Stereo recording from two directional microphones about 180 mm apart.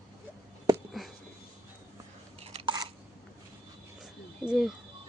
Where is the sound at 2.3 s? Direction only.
35° right (ahead or behind).